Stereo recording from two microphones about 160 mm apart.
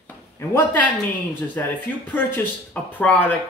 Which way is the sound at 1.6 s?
10° left (ahead or behind).